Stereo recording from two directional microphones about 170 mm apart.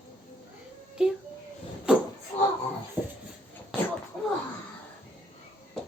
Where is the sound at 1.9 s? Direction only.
5° right (ahead or behind).